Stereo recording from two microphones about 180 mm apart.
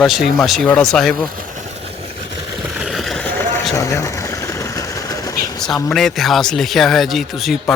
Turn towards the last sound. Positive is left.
turn(degrees=0)  # may be behind; listen again after turning